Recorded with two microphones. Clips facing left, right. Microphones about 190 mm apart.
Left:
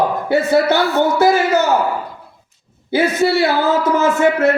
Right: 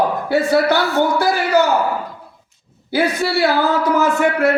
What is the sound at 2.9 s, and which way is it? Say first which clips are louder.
A man's voice: left 3 dB; 20° left (ahead or behind).